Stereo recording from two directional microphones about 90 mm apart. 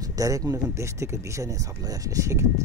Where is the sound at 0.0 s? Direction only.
40° right (ahead or behind).